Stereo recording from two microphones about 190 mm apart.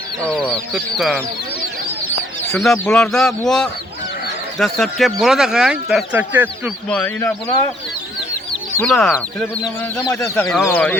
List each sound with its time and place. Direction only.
0.3 s speech: 5° left (ahead or behind)
2.5 s speech: centre (ahead or behind)
6.9 s speech: 10° left (ahead or behind)
8.8 s speech: 5° left (ahead or behind)
10.0 s speech: 15° left (ahead or behind)
10.3 s speech: 5° left (ahead or behind)